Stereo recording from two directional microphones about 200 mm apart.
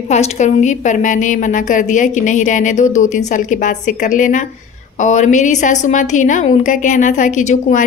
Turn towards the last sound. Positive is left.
turn(degrees=35)  # may be behind; listen again after turning